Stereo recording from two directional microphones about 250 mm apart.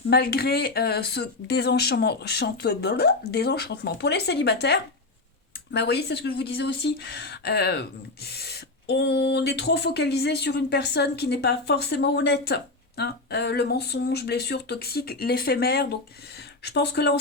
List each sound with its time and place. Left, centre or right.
0.1 s speech: left